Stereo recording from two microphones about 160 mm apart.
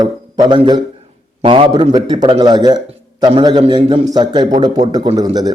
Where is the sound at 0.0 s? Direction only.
25° right (ahead or behind).